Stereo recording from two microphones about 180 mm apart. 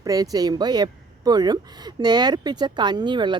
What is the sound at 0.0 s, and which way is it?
A woman's voice, 20° right (ahead or behind).